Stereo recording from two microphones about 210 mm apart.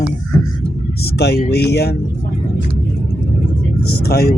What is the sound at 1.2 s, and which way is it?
Speech, 50° left (ahead or behind).